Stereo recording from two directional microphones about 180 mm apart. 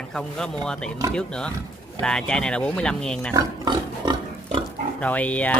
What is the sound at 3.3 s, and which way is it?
Pig, 20° right (ahead or behind).